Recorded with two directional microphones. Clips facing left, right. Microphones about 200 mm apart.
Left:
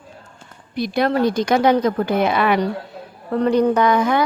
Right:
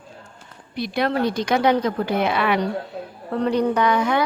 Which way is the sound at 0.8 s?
45° left (ahead or behind).